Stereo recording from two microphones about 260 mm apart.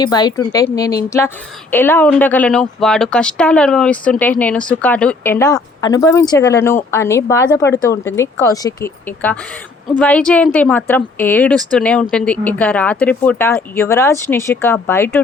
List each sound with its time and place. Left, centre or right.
0.0 s speech: centre